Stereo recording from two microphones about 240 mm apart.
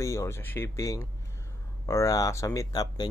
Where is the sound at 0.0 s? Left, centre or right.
Centre.